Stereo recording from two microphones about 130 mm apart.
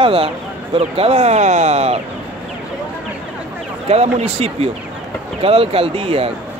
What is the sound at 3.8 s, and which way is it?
Speech, 55° right (ahead or behind).